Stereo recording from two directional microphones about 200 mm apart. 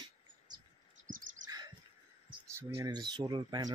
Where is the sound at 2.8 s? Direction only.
20° right (ahead or behind).